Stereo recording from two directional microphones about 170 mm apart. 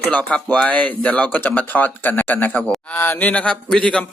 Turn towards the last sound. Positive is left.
turn(degrees=5)  # may be behind; listen again after turning